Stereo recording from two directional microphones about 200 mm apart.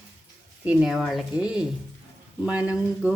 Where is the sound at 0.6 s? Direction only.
Centre (ahead or behind).